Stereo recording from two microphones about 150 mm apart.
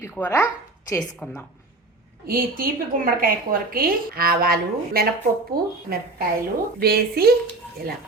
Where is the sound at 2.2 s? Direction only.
75° right (ahead or behind).